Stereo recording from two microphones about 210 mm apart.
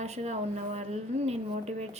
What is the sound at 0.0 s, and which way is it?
A woman's voice, 30° right (ahead or behind).